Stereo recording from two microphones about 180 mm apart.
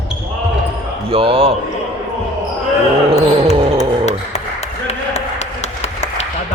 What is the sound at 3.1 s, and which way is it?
Basketball bounce, 35° right (ahead or behind).